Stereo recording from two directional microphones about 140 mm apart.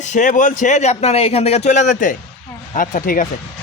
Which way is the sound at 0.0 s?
60° left (ahead or behind).